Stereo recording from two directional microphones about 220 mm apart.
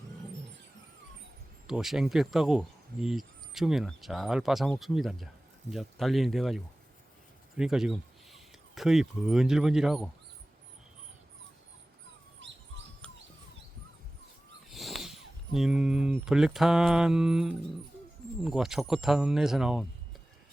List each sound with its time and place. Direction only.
1.6 s speech: centre (ahead or behind)
12.4 s bird: 55° right (ahead or behind)
13.0 s bird: 5° left (ahead or behind)
14.7 s speech: centre (ahead or behind)